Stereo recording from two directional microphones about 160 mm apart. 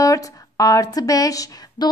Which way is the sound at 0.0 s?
20° left (ahead or behind).